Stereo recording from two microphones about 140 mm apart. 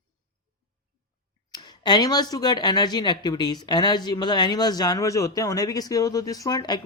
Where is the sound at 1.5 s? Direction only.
30° left (ahead or behind).